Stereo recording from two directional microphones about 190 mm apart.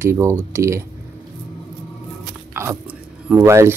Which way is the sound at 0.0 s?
15° right (ahead or behind).